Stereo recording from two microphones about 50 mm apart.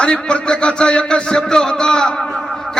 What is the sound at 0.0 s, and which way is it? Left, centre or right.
A man's voice, centre.